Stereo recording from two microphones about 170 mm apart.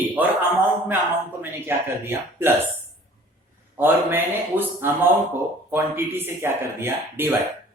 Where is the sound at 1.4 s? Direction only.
15° right (ahead or behind).